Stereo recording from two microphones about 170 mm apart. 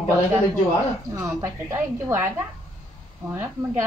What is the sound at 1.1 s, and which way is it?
A woman's voice, 20° right (ahead or behind).